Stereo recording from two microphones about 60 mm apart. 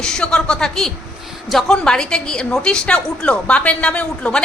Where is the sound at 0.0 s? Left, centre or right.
Centre.